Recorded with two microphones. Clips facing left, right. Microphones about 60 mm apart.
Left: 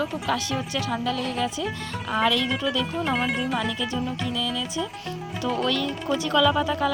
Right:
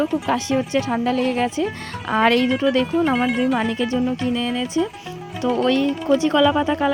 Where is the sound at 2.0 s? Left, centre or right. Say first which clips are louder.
Right 6 dB; right.